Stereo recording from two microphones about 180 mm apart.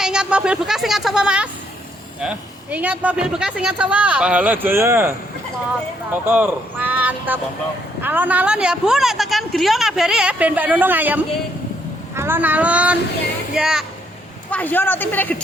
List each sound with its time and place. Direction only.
0.0 s a sound: 5° right (ahead or behind)
2.2 s a woman's voice: 5° right (ahead or behind)
14.5 s speech: 10° left (ahead or behind)